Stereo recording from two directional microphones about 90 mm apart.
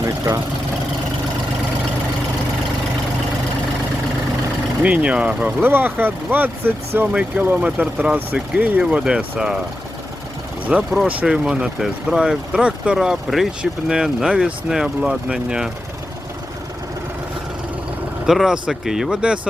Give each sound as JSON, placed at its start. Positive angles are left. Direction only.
{"t": 4.8, "sound": "speech", "side_deg": -15}
{"t": 10.9, "sound": "speech", "side_deg": -15}
{"t": 18.3, "sound": "speech", "side_deg": -5}